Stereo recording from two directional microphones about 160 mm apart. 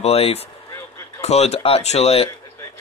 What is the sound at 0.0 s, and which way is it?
Speech, 40° left (ahead or behind).